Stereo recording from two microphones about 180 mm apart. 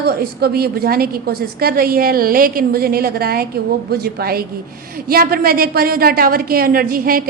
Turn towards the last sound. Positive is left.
turn(degrees=-55)  # may be behind; listen again after turning